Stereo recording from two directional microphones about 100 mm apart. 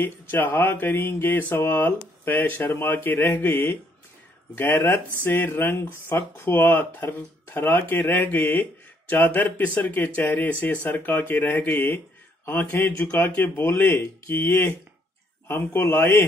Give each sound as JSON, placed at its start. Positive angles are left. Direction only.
{"t": 0.0, "sound": "speech", "side_deg": 20}